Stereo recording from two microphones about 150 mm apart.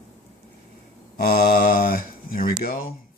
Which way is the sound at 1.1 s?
90° left.